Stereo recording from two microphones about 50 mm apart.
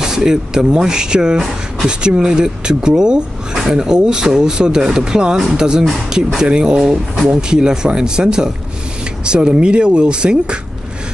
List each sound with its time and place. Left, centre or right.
0.0 s speech: centre